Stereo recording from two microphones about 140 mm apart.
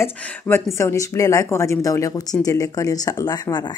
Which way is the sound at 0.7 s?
20° left (ahead or behind).